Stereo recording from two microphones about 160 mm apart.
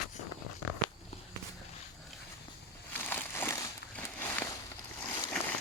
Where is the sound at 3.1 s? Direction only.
15° left (ahead or behind).